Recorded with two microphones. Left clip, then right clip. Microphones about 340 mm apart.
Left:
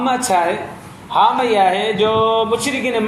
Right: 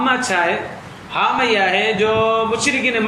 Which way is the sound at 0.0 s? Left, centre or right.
Centre.